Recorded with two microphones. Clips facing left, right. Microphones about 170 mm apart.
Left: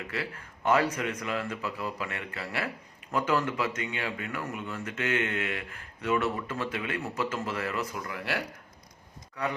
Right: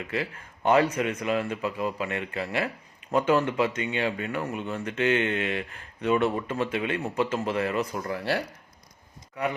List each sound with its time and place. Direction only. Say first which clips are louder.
0.1 s speech: right 5 dB; 25° right (ahead or behind)